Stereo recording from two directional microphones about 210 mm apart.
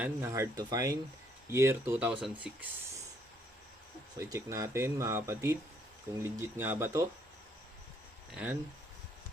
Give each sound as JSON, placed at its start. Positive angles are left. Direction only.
{"t": 0.0, "sound": "speech", "side_deg": -15}
{"t": 4.2, "sound": "speech", "side_deg": -15}
{"t": 8.3, "sound": "speech", "side_deg": -5}